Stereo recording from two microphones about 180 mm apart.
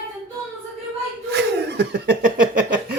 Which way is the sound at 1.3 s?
70° right (ahead or behind).